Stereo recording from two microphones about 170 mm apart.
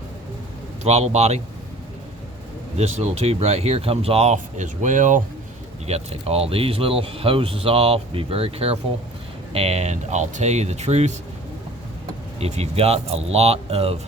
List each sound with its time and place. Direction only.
0.9 s speech: 40° right (ahead or behind)
2.7 s speech: 40° right (ahead or behind)
5.9 s speech: 35° right (ahead or behind)
12.4 s speech: 40° right (ahead or behind)